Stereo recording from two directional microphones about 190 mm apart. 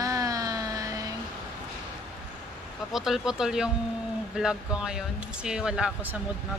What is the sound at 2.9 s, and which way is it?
Speech, centre (ahead or behind).